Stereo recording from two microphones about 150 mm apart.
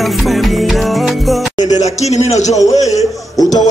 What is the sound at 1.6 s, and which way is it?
Speech, 50° left (ahead or behind).